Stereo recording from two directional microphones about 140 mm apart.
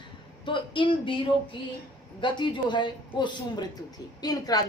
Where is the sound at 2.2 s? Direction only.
35° left (ahead or behind).